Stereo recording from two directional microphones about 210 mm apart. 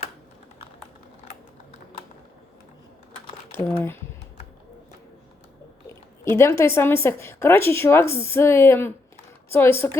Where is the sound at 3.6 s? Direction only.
30° left (ahead or behind).